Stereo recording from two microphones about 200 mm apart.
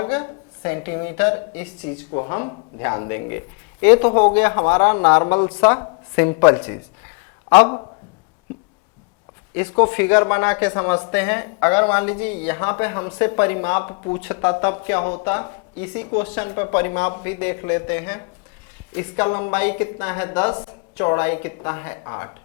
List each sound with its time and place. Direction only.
0.0 s a woman's voice: 20° left (ahead or behind)
3.9 s a woman's voice: 30° left (ahead or behind)
9.9 s a woman's voice: 20° left (ahead or behind)
14.2 s speech: 15° left (ahead or behind)
14.4 s a woman's voice: 25° left (ahead or behind)
16.0 s speech: 35° left (ahead or behind)
16.3 s a woman's voice: 20° left (ahead or behind)